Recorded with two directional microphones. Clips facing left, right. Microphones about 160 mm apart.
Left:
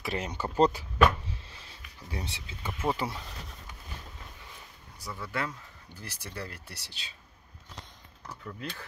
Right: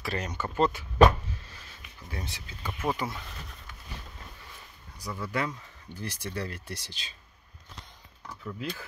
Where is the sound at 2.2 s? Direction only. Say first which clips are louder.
Even; 25° left (ahead or behind).